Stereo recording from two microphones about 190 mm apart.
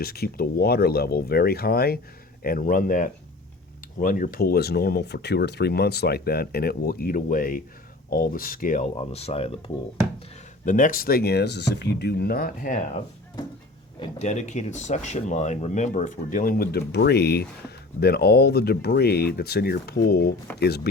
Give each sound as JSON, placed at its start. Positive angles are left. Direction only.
{"t": 0.0, "sound": "speech", "side_deg": 55}
{"t": 10.7, "sound": "speech", "side_deg": 45}
{"t": 14.2, "sound": "speech", "side_deg": 35}